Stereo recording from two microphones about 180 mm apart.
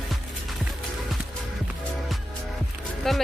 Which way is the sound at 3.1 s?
Centre (ahead or behind).